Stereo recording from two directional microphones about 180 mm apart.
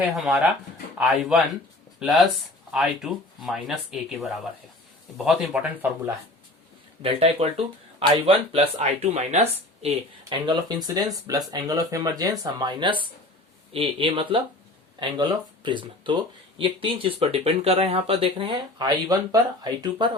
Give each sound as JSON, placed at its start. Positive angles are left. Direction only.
{"t": 0.0, "sound": "speech", "side_deg": 0}
{"t": 7.0, "sound": "speech", "side_deg": -35}